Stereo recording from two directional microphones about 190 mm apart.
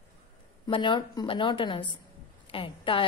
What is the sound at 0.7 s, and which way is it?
A woman's voice, 25° left (ahead or behind).